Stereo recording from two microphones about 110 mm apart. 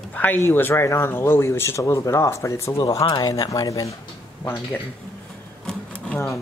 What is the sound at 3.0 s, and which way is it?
Speech, 40° left (ahead or behind).